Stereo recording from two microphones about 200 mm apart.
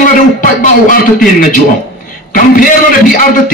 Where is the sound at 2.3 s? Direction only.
45° left (ahead or behind).